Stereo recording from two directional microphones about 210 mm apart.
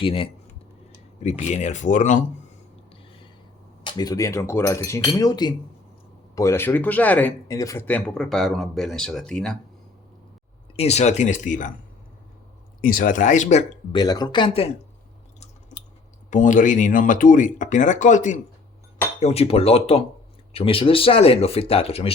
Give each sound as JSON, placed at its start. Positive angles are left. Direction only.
{"t": 0.0, "sound": "speech", "side_deg": 25}
{"t": 3.8, "sound": "speech", "side_deg": 20}
{"t": 10.8, "sound": "speech", "side_deg": 30}
{"t": 12.8, "sound": "speech", "side_deg": 40}
{"t": 13.9, "sound": "speech", "side_deg": 20}
{"t": 16.3, "sound": "speech", "side_deg": 35}